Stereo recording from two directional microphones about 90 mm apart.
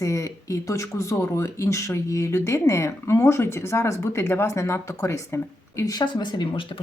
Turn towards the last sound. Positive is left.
turn(degrees=70)  # may be behind; listen again after turning